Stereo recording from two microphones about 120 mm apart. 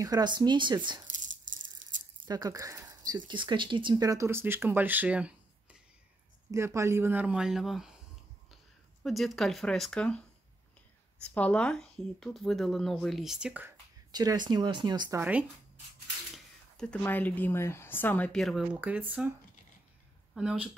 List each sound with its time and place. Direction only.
0.0 s speech: 35° right (ahead or behind)
1.1 s rattle: 90° right
2.2 s speech: 30° right (ahead or behind); by 5.8 s 10° right (ahead or behind)
6.5 s speech: 25° right (ahead or behind); by 7.9 s 5° right (ahead or behind)
9.0 s speech: centre (ahead or behind)
11.3 s speech: 10° left (ahead or behind); by 13.7 s 10° right (ahead or behind)
14.1 s speech: 35° right (ahead or behind)
16.7 s speech: 10° left (ahead or behind)
18.3 s speech: centre (ahead or behind)
18.7 s speech: 15° right (ahead or behind)
20.3 s speech: 10° right (ahead or behind)